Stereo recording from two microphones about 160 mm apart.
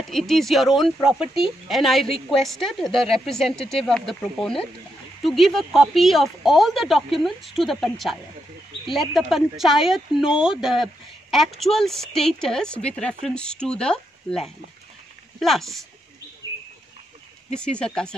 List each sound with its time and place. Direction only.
0.1 s speech: centre (ahead or behind)
17.6 s speech: 5° left (ahead or behind)